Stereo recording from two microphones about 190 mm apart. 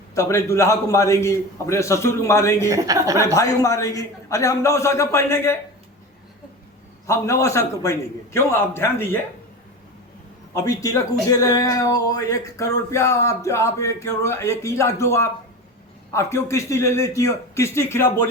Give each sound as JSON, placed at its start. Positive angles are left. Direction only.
{"t": 0.1, "sound": "speech", "side_deg": 15}
{"t": 2.6, "sound": "a woman's voice", "side_deg": -15}
{"t": 3.3, "sound": "speech", "side_deg": 15}
{"t": 7.1, "sound": "speech", "side_deg": 15}
{"t": 10.5, "sound": "speech", "side_deg": 15}